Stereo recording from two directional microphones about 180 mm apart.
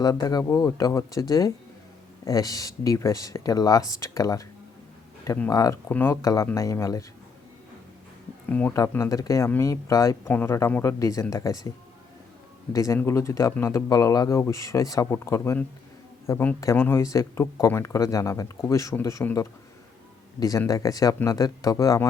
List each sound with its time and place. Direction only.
0.0 s speech: 20° left (ahead or behind)
8.4 s speech: 10° left (ahead or behind)
12.7 s speech: 15° left (ahead or behind)